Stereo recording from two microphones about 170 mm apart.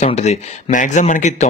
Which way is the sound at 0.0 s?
40° left (ahead or behind).